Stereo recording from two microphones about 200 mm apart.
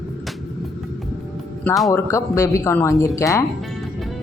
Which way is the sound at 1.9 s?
15° left (ahead or behind).